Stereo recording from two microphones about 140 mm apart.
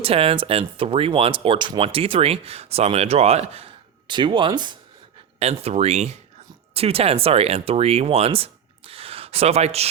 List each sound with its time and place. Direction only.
0.0 s speech: 40° right (ahead or behind)
5.4 s speech: 45° right (ahead or behind)